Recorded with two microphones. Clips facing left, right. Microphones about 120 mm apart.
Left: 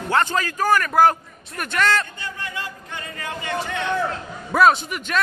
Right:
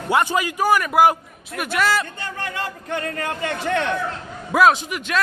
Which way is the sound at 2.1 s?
65° right (ahead or behind).